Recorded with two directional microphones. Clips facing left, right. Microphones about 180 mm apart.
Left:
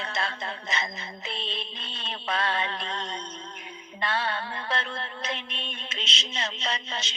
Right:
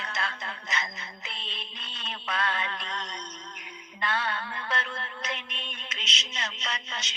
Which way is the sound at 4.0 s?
30° left (ahead or behind).